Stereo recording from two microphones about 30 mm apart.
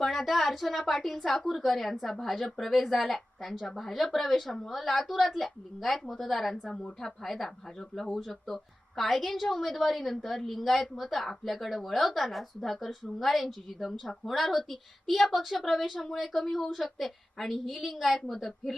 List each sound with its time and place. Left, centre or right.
0.0 s a woman's voice: centre
8.2 s a woman's voice: centre